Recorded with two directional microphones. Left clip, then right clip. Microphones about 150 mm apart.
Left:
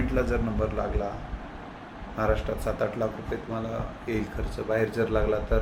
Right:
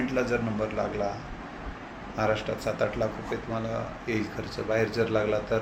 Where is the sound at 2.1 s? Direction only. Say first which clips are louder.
Even; 15° left (ahead or behind).